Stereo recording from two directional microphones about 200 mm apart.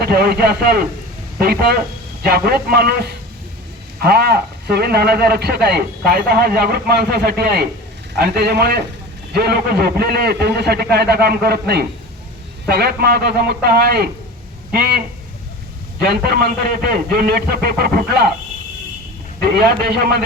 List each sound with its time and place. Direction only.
0.0 s speech: 50° right (ahead or behind)
19.4 s speech: 50° right (ahead or behind)